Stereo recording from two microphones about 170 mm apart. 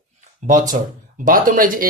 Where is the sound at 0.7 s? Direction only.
50° right (ahead or behind).